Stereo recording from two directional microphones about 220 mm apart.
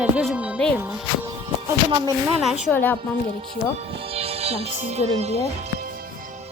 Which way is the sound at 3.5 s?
25° right (ahead or behind).